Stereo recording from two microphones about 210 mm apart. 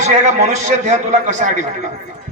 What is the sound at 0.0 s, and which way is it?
A man's voice, 35° right (ahead or behind).